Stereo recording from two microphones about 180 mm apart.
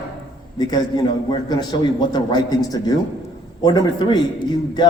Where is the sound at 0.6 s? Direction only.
20° left (ahead or behind).